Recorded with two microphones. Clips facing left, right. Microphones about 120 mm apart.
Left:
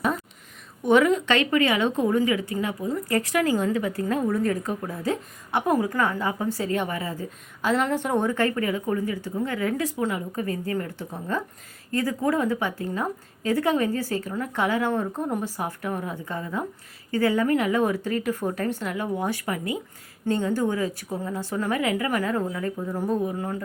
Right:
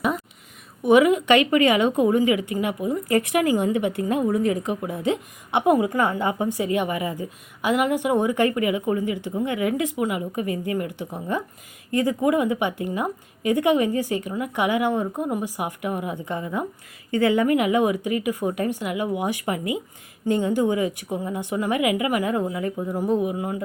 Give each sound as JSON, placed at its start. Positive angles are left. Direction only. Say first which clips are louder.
{"t": 0.9, "sound": "a woman's voice", "louder": "right 3 dB", "side_deg": -10}
{"t": 4.0, "sound": "a woman's voice", "louder": "right 2 dB", "side_deg": -15}